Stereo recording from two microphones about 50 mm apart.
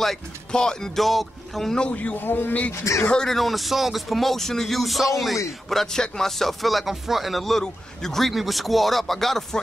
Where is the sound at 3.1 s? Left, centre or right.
Centre.